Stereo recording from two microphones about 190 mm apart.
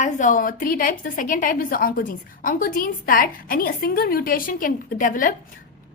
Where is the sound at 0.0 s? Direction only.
40° left (ahead or behind).